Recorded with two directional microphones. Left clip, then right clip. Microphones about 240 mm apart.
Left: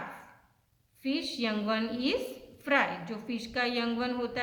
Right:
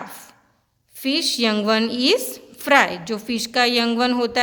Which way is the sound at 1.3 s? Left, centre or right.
Right.